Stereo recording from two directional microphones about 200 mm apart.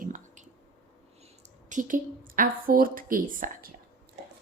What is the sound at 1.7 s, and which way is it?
A woman's voice, 40° right (ahead or behind).